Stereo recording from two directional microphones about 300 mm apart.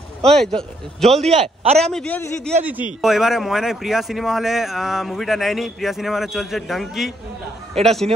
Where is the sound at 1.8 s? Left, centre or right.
Centre.